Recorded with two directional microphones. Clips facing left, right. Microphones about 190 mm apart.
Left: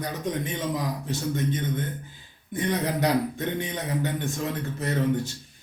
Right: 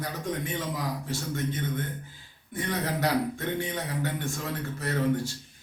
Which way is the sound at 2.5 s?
20° left (ahead or behind).